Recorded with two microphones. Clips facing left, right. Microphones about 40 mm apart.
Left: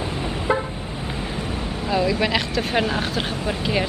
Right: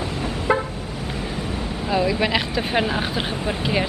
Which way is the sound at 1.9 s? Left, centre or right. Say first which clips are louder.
Even; centre.